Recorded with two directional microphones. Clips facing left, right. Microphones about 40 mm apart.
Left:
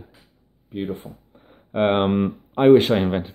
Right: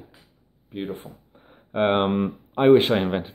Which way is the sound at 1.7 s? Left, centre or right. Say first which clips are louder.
Left 2 dB; centre.